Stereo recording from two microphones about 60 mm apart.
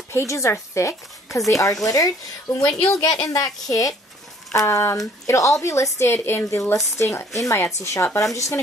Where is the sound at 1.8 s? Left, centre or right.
Left.